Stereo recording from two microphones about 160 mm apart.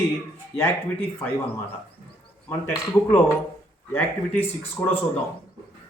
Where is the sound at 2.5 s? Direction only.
15° left (ahead or behind).